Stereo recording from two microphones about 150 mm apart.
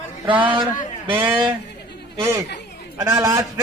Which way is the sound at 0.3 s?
35° right (ahead or behind).